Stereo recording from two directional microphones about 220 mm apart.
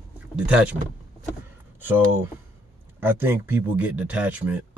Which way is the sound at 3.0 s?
10° right (ahead or behind).